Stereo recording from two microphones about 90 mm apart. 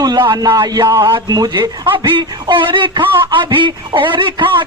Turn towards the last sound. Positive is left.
turn(degrees=-65)  # may be behind; listen again after turning